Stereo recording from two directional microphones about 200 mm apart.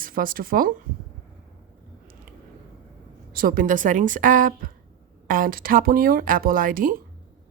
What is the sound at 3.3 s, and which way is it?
A woman's voice, 45° right (ahead or behind).